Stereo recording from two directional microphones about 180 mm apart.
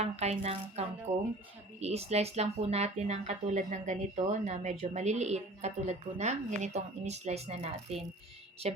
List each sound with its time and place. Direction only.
0.0 s a woman's voice: 35° right (ahead or behind)